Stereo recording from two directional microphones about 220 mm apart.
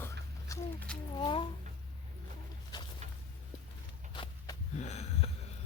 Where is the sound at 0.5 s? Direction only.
15° left (ahead or behind).